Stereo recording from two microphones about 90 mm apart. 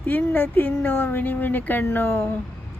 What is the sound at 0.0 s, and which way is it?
Speech, 20° left (ahead or behind).